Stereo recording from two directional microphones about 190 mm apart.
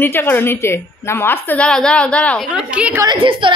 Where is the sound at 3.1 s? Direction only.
25° right (ahead or behind).